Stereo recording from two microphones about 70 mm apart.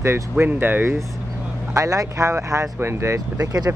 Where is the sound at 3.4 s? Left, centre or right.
Right.